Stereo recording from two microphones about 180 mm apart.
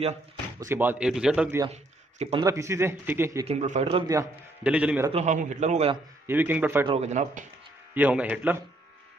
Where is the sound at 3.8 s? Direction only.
20° right (ahead or behind).